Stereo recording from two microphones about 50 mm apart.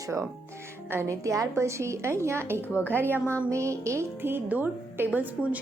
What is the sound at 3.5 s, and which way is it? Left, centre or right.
Speech, right.